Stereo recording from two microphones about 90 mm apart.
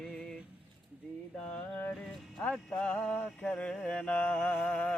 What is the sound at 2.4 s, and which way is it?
Mantra, 10° left (ahead or behind).